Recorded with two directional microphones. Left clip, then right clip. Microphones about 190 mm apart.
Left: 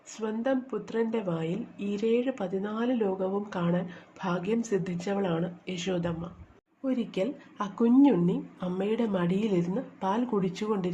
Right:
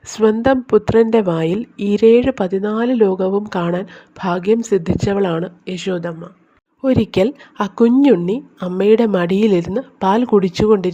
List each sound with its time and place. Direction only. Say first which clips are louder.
0.1 s a woman's voice: right 16 dB; 50° right (ahead or behind); by 6.3 s 30° right (ahead or behind)
6.8 s a woman's voice: right 15 dB; 50° right (ahead or behind)